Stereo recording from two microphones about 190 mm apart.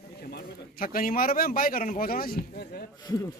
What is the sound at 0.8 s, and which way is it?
A man's voice, 50° left (ahead or behind).